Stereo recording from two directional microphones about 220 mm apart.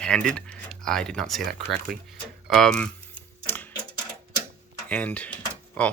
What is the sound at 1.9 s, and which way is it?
Speech, 40° right (ahead or behind).